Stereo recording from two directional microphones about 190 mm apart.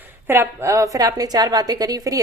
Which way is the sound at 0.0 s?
10° right (ahead or behind).